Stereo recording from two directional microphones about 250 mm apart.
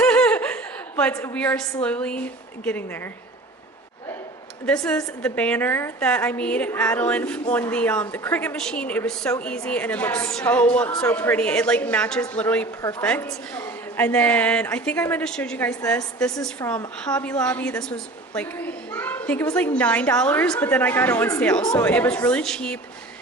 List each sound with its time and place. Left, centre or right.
0.0 s a woman's voice: centre
4.6 s a woman's voice: centre